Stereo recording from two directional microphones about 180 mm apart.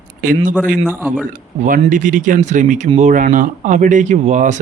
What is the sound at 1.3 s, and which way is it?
Speech, 50° right (ahead or behind).